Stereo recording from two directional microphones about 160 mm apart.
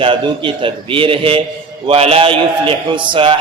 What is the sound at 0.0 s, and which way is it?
A man's voice, 35° right (ahead or behind).